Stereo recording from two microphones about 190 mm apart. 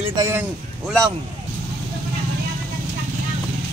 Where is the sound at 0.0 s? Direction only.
25° right (ahead or behind).